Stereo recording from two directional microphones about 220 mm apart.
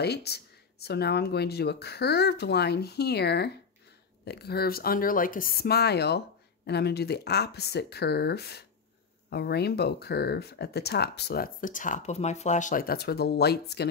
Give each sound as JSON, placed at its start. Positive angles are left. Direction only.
{"t": 0.0, "sound": "speech", "side_deg": 50}